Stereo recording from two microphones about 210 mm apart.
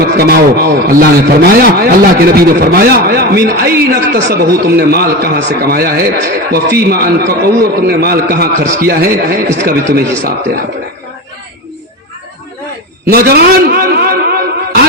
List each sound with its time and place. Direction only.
0.0 s a man's voice: 45° right (ahead or behind)
13.1 s a man's voice: 50° right (ahead or behind)